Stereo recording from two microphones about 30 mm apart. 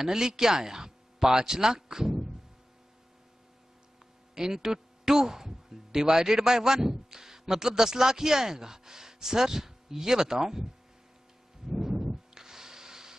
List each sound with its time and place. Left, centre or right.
0.0 s speech: centre
4.4 s speech: centre
11.7 s a sound: centre